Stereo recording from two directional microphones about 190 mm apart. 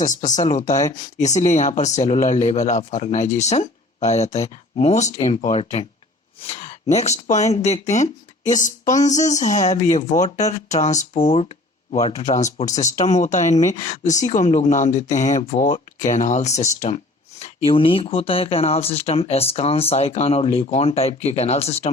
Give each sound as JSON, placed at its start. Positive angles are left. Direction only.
{"t": 0.0, "sound": "speech", "side_deg": 40}
{"t": 17.4, "sound": "speech", "side_deg": 30}